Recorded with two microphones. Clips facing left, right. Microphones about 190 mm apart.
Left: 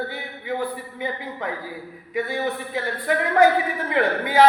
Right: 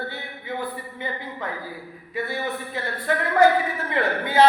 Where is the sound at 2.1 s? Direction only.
15° left (ahead or behind).